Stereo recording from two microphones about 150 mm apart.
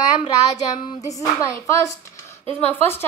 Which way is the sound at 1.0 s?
20° left (ahead or behind).